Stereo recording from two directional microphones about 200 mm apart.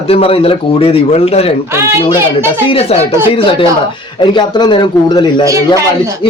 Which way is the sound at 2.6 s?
30° left (ahead or behind).